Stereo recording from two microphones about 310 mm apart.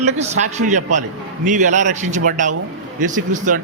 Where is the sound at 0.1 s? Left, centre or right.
Right.